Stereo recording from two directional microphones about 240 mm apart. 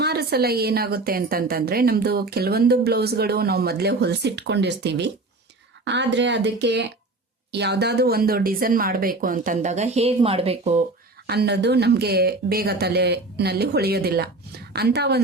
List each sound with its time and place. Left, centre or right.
0.0 s a woman's voice: right
11.3 s speech: right